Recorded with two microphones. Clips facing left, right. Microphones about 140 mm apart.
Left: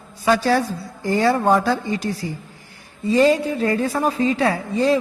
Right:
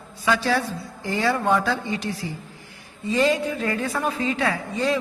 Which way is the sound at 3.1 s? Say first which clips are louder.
Left 5 dB; 35° left (ahead or behind).